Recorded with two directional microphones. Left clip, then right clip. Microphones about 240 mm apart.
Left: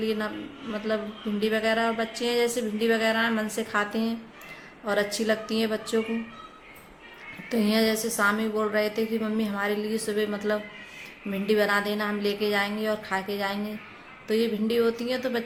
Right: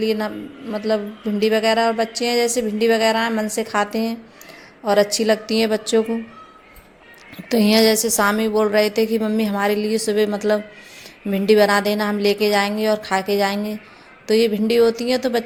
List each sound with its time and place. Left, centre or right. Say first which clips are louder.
0.0 s speech: right 7 dB; right
7.5 s a woman's voice: right 9 dB; right